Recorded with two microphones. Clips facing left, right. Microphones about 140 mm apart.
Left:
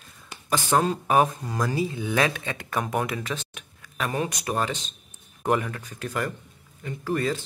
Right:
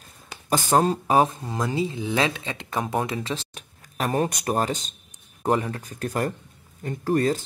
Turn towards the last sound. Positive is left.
turn(degrees=-45)  # may be behind; listen again after turning